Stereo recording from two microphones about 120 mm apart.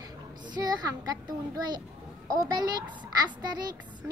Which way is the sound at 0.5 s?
35° right (ahead or behind).